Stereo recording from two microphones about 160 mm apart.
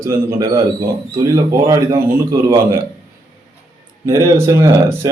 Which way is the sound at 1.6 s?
20° right (ahead or behind).